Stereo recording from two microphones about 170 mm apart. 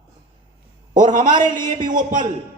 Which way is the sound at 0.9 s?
50° right (ahead or behind).